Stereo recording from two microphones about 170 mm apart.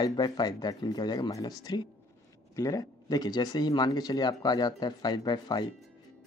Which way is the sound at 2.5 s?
20° left (ahead or behind).